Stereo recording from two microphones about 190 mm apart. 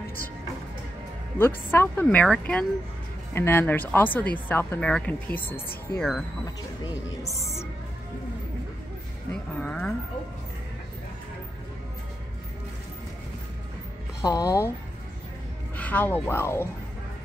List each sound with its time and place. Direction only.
1.4 s speech: 10° left (ahead or behind)
6.4 s speech: 20° left (ahead or behind)
9.3 s a sound: 5° left (ahead or behind)
14.2 s speech: 15° left (ahead or behind)
15.7 s speech: 10° left (ahead or behind)